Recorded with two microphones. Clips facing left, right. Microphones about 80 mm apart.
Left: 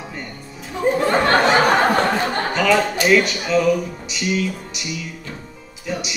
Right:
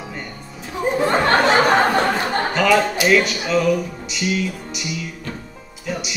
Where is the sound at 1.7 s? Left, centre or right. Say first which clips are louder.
Even; centre.